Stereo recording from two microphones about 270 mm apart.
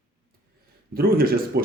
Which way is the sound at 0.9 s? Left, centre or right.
Right.